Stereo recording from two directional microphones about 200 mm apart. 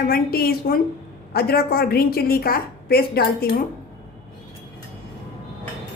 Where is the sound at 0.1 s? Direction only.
50° left (ahead or behind).